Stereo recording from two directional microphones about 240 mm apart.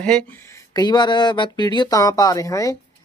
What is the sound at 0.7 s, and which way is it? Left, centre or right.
Speech, centre.